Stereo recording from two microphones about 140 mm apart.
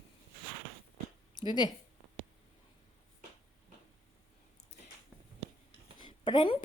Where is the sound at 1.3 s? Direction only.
30° left (ahead or behind).